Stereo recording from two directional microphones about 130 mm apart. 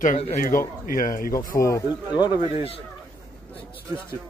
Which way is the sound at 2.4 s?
50° left (ahead or behind).